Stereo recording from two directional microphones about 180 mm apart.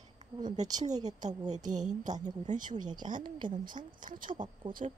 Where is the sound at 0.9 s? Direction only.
20° right (ahead or behind).